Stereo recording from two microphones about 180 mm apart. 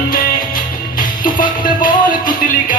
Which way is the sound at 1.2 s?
50° left (ahead or behind).